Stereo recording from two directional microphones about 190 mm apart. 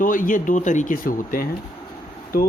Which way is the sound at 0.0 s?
45° left (ahead or behind).